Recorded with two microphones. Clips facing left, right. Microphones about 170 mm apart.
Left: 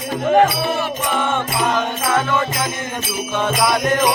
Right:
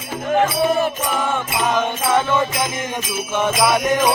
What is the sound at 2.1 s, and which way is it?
Music, 20° right (ahead or behind).